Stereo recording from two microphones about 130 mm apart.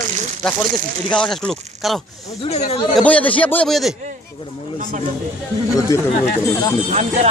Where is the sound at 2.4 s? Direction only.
55° left (ahead or behind).